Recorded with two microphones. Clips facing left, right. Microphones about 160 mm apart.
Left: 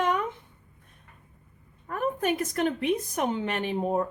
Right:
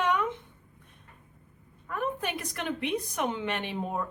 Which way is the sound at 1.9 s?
45° left (ahead or behind).